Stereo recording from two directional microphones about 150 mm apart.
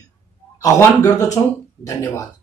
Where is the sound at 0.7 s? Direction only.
20° left (ahead or behind).